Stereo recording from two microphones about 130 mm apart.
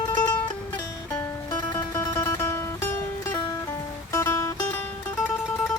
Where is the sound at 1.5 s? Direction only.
30° left (ahead or behind).